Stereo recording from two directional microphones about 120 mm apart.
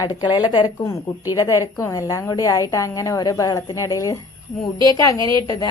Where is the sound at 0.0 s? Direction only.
40° left (ahead or behind).